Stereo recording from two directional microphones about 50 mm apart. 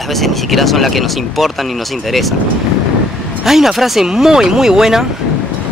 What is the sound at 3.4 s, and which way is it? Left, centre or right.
Speech, centre.